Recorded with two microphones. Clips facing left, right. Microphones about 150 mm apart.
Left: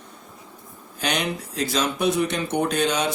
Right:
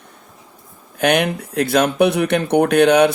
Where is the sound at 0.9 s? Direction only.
60° right (ahead or behind).